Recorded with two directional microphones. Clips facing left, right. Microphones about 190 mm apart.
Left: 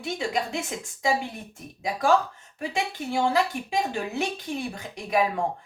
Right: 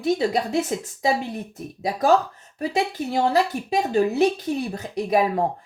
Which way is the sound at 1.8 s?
40° right (ahead or behind).